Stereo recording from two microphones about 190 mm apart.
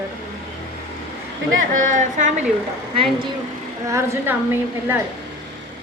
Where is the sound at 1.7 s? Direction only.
45° right (ahead or behind).